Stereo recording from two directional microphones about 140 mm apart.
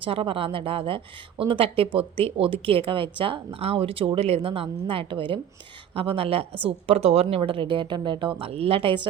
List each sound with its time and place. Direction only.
0.0 s a woman's voice: 40° right (ahead or behind)